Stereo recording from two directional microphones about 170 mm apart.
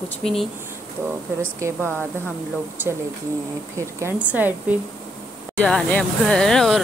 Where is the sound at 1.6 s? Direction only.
15° right (ahead or behind).